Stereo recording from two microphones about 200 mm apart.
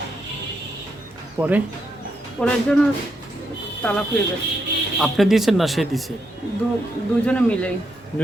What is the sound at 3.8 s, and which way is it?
Speech, 5° left (ahead or behind).